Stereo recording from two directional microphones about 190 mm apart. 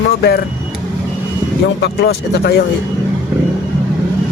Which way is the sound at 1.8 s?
60° left (ahead or behind).